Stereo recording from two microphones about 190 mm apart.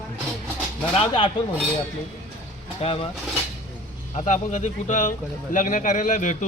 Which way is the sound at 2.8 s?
30° left (ahead or behind).